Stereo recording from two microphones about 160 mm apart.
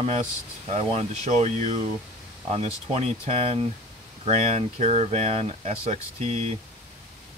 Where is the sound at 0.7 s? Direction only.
45° right (ahead or behind).